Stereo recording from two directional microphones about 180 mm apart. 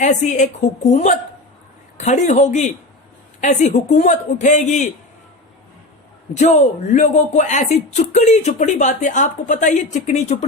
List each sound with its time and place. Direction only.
0.0 s a woman's voice: 40° left (ahead or behind)
6.9 s speech: 40° left (ahead or behind)